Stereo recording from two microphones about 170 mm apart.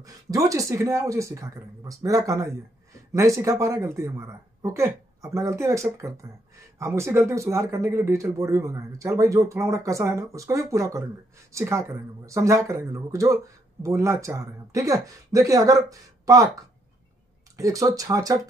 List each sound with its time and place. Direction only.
0.0 s speech: 20° right (ahead or behind)
17.6 s speech: 20° right (ahead or behind)